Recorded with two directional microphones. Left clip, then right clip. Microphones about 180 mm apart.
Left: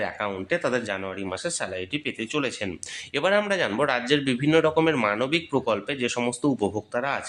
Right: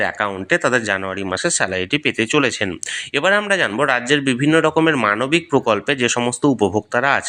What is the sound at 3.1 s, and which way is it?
Speech, 20° right (ahead or behind).